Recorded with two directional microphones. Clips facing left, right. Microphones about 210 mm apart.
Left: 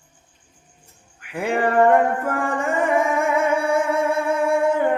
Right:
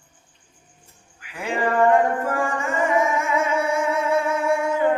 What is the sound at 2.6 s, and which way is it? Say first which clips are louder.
Music: left 3 dB; 60° left (ahead or behind).